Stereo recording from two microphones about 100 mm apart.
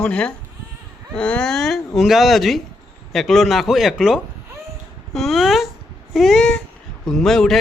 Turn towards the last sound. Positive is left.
turn(degrees=5)  # may be behind; listen again after turning